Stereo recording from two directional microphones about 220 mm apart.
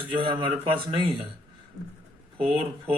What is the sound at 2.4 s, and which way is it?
Speech, 25° right (ahead or behind).